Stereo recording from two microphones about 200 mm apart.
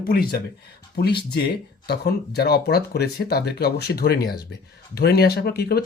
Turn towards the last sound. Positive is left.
turn(degrees=50)  # may be behind; listen again after turning